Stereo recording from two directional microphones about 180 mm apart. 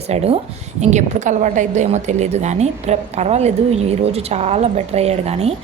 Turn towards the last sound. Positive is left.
turn(degrees=-35)  # may be behind; listen again after turning